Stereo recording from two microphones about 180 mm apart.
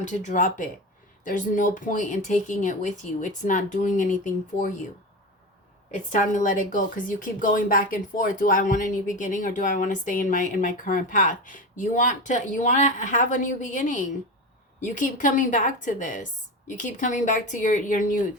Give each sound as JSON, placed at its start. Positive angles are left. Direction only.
{"t": 0.0, "sound": "speech", "side_deg": 45}
{"t": 5.9, "sound": "speech", "side_deg": 45}